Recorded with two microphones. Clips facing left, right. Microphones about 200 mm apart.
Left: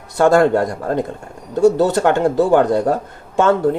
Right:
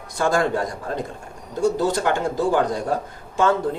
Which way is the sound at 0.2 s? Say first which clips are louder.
Left 8 dB; 65° left (ahead or behind).